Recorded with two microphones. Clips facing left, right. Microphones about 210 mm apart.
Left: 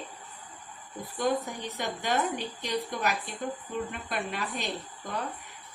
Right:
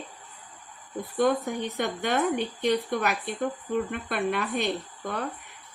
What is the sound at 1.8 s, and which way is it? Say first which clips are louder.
A woman's voice: right 3 dB; 50° right (ahead or behind).